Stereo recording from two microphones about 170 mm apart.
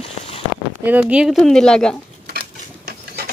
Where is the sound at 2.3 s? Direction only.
70° right (ahead or behind).